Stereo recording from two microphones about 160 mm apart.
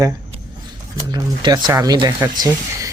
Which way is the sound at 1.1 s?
25° right (ahead or behind).